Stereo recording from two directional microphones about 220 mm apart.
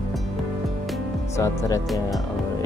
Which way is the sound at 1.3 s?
15° left (ahead or behind).